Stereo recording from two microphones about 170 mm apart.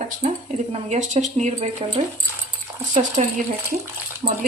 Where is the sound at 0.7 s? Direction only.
40° right (ahead or behind).